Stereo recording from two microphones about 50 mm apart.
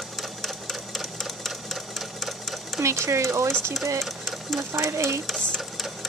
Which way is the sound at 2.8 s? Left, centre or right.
Right.